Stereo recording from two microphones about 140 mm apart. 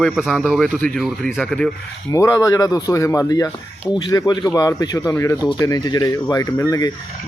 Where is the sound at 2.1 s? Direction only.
25° left (ahead or behind).